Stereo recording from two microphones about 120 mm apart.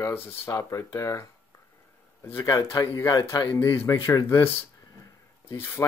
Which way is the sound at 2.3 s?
30° left (ahead or behind).